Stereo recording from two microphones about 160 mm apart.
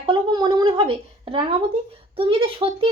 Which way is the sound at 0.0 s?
30° right (ahead or behind).